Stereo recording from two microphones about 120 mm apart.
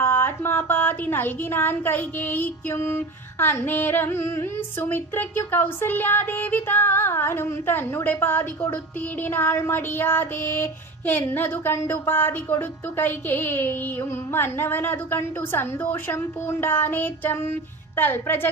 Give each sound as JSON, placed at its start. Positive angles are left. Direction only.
{"t": 0.0, "sound": "speech", "side_deg": 20}